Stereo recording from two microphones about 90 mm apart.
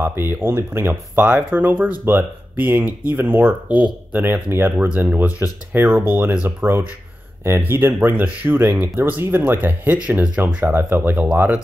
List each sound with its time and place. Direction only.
0.0 s speech: 25° right (ahead or behind)